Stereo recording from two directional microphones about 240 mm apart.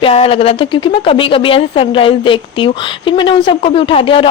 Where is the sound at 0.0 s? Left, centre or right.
Left.